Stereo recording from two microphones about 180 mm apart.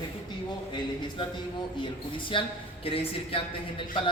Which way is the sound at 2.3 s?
30° left (ahead or behind).